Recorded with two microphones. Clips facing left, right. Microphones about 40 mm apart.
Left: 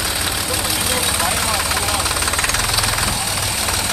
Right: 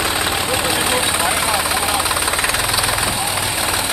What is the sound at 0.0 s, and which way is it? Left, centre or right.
Vehicle, right.